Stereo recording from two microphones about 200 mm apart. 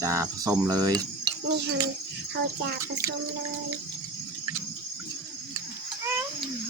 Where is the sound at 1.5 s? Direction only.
55° right (ahead or behind).